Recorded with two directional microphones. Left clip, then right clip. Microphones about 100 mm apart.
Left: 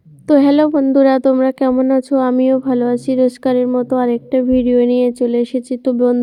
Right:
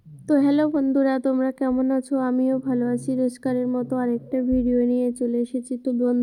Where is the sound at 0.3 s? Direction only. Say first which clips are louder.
Left 9 dB; 45° left (ahead or behind).